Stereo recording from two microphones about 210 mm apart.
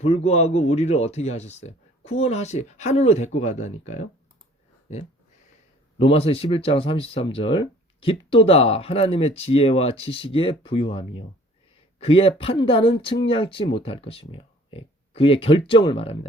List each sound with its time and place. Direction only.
0.0 s speech: 30° left (ahead or behind)
6.0 s speech: 25° left (ahead or behind)